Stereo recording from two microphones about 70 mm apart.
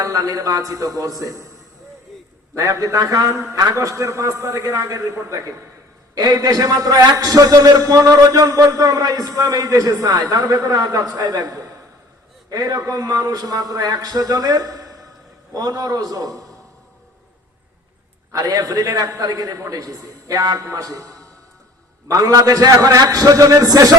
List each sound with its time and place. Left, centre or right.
0.0 s a man's voice: right
2.6 s a man's voice: right
6.1 s a man's voice: right
18.3 s a man's voice: right
20.7 s a man's voice: right